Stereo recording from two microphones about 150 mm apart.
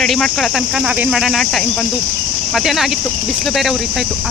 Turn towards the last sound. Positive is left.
turn(degrees=0)  # may be behind; listen again after turning